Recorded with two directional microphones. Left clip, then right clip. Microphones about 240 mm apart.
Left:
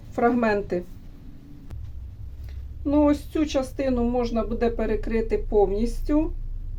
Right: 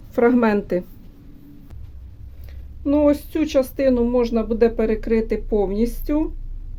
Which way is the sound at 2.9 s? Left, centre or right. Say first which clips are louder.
Right 4 dB; right.